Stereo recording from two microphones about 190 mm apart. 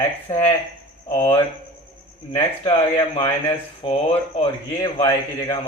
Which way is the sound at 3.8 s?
30° left (ahead or behind).